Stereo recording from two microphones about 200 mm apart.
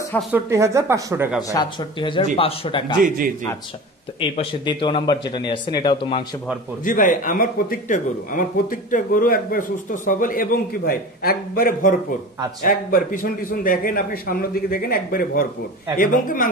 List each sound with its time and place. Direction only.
0.3 s speech: 15° right (ahead or behind)
1.5 s speech: 20° left (ahead or behind)
4.2 s speech: 25° left (ahead or behind)
6.8 s speech: 40° left (ahead or behind)